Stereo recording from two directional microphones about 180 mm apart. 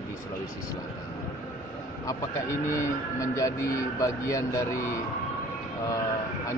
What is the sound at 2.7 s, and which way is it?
Speech, 15° left (ahead or behind).